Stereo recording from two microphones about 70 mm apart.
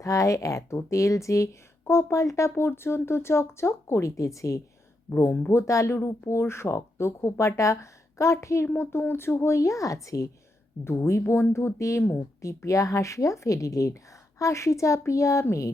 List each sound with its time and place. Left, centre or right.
0.0 s a woman's voice: left
5.1 s a woman's voice: left
8.6 s a woman's voice: left